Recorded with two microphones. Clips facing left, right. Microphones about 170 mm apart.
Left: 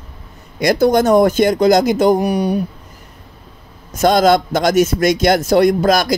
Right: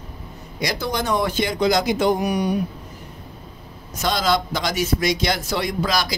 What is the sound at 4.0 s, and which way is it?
A man's voice, 50° left (ahead or behind).